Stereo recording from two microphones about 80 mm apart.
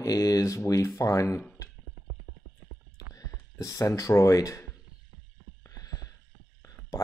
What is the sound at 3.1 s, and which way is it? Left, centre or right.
Speech, left.